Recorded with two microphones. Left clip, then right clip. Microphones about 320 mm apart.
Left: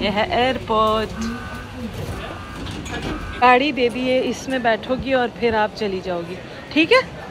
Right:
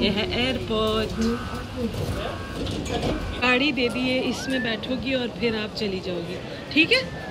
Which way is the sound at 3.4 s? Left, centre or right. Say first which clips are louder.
Left 7 dB; centre.